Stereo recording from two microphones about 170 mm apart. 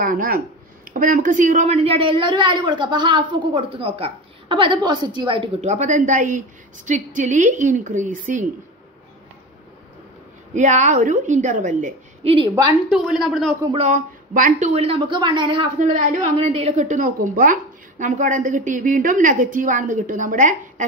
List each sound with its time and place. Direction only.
0.0 s a woman's voice: 55° right (ahead or behind); by 5.5 s 30° right (ahead or behind)
5.6 s a woman's voice: 45° right (ahead or behind)
10.5 s a woman's voice: 45° right (ahead or behind)
12.2 s a woman's voice: 35° right (ahead or behind)
12.9 s a woman's voice: centre (ahead or behind)
13.8 s a woman's voice: 50° right (ahead or behind); by 15.7 s 30° right (ahead or behind)
15.8 s a woman's voice: 45° right (ahead or behind)